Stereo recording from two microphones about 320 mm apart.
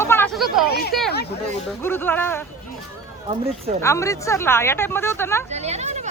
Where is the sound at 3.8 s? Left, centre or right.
Centre.